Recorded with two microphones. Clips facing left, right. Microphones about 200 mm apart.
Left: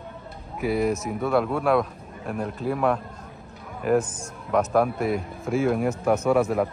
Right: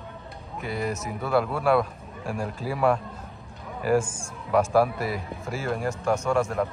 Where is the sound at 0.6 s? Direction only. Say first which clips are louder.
Left 6 dB; centre (ahead or behind).